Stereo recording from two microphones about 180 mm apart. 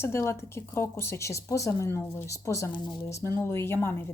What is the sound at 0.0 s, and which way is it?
Speech, 15° left (ahead or behind).